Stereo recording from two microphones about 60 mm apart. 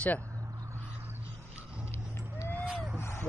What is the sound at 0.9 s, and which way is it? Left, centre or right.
Crow, right.